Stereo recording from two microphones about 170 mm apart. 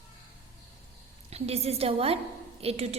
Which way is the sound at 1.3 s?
35° right (ahead or behind).